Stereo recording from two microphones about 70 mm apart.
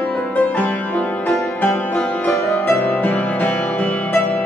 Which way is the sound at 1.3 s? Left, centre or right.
Left.